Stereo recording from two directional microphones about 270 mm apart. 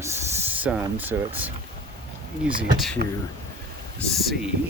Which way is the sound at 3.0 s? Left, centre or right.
Right.